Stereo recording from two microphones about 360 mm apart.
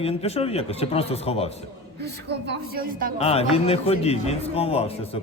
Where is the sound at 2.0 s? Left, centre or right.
Right.